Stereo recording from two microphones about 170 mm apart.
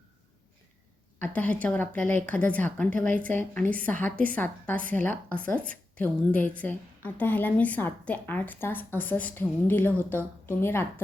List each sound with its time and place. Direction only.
1.2 s a woman's voice: 10° left (ahead or behind)